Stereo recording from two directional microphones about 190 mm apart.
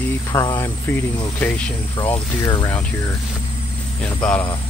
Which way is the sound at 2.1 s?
20° left (ahead or behind).